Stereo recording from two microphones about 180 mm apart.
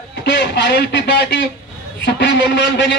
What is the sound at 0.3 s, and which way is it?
A man's voice, 75° left (ahead or behind).